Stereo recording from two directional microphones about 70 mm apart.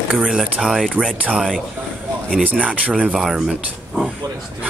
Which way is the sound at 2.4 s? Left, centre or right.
Centre.